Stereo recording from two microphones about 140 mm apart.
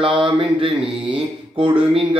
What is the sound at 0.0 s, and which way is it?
Speech, 40° right (ahead or behind).